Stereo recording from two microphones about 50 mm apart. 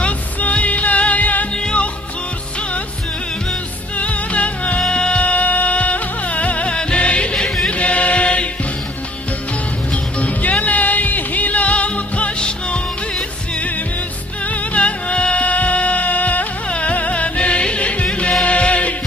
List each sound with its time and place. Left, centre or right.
0.0 s music: left
1.6 s music: centre
4.0 s music: left
7.3 s chant: centre
7.7 s chant: left
10.1 s music: left
14.4 s music: left